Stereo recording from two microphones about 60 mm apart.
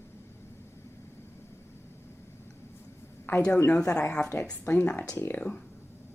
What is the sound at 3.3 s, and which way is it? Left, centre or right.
Speech, left.